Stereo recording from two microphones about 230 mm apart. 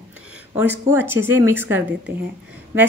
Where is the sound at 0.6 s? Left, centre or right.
Centre.